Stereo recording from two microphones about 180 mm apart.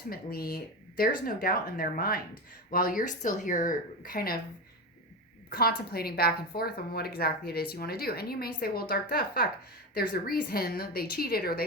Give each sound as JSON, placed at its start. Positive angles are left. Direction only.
{"t": 0.1, "sound": "a woman's voice", "side_deg": 55}
{"t": 5.5, "sound": "a woman's voice", "side_deg": 60}